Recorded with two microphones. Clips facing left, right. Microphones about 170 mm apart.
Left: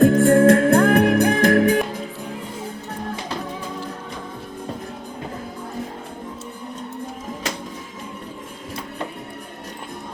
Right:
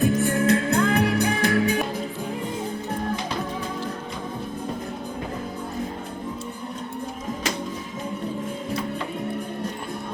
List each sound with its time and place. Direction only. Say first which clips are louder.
0.1 s music: left 8 dB; 90° left
0.3 s music: left 7 dB; 50° left (ahead or behind)